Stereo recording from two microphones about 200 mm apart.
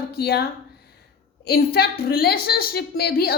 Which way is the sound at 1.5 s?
50° left (ahead or behind).